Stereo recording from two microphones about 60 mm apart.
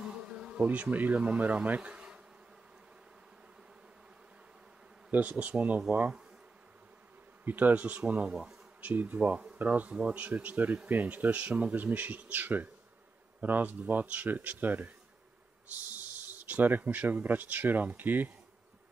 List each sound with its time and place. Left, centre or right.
0.0 s speech: centre
5.1 s speech: right
7.4 s speech: right